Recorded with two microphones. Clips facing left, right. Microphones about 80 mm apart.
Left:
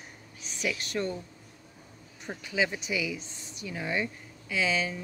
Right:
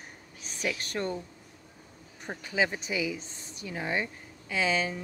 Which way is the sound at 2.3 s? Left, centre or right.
Right.